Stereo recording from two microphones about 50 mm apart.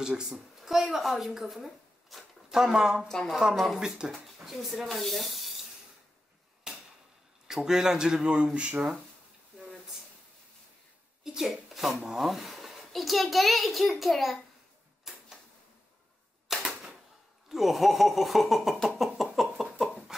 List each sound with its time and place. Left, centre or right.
0.0 s a woman's voice: centre
3.5 s speech: centre
3.8 s speech: centre
4.1 s speech: centre
6.7 s a sound: centre
7.4 s speech: centre; by 8.8 s right
11.3 s speech: centre
15.1 s a sound: centre
16.4 s typewriter: centre
17.5 s speech: centre
18.8 s a sound: centre